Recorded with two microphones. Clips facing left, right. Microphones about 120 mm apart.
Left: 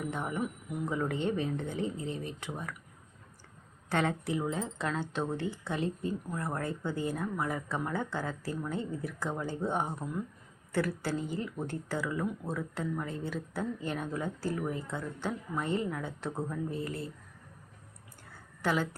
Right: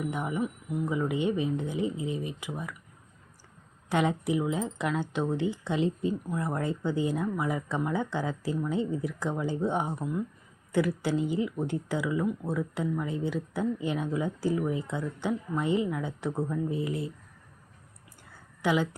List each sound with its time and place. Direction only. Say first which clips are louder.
0.1 s speech: right 3 dB; 10° right (ahead or behind)
3.8 s speech: right 4 dB; 15° right (ahead or behind)
18.6 s speech: right 4 dB; 15° right (ahead or behind)